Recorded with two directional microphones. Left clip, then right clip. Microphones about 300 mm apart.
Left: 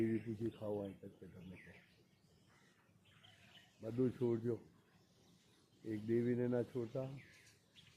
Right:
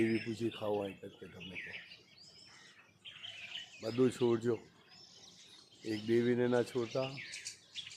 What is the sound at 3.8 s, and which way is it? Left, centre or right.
Speech, centre.